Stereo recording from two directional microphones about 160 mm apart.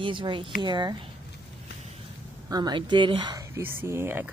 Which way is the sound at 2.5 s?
25° right (ahead or behind).